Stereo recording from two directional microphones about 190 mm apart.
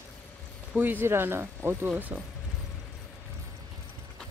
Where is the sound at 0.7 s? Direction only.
10° right (ahead or behind).